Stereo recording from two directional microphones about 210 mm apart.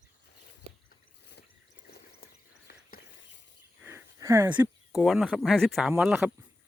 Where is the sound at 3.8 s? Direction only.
10° right (ahead or behind).